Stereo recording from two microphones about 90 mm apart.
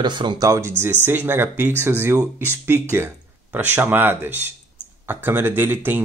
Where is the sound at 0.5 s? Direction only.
30° right (ahead or behind).